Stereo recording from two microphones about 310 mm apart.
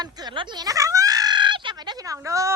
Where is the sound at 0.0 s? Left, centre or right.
Centre.